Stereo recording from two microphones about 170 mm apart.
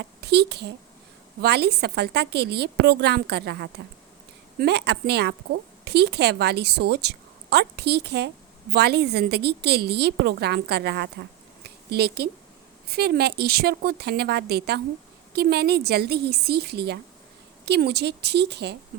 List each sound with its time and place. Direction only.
0.0 s a child's voice: 75° right (ahead or behind)
11.6 s a sound: 70° right (ahead or behind)
12.9 s a woman's voice: 70° right (ahead or behind)